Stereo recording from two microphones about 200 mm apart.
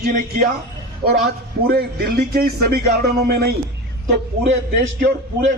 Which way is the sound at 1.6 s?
50° right (ahead or behind).